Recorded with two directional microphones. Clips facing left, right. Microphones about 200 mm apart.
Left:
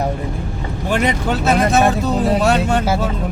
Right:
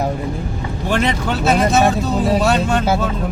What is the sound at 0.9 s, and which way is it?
Speech, 15° left (ahead or behind).